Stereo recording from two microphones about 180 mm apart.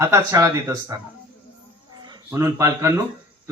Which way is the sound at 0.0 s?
15° right (ahead or behind).